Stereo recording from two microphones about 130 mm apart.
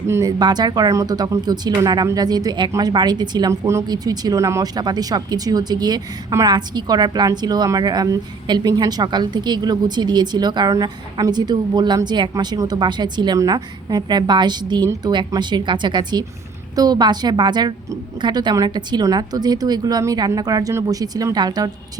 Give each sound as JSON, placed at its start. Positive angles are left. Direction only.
{"t": 0.1, "sound": "a woman's voice", "side_deg": -30}